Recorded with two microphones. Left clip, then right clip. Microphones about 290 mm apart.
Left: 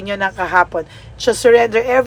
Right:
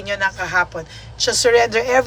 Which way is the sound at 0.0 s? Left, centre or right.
Centre.